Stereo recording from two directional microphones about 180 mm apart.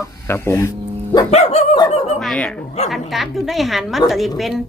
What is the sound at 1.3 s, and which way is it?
Dog, 35° left (ahead or behind).